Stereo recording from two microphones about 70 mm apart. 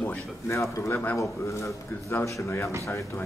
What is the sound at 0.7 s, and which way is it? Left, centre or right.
A man's voice, left.